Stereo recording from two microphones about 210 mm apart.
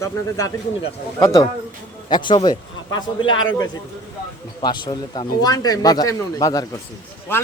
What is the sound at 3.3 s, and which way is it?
Speech, 70° left (ahead or behind).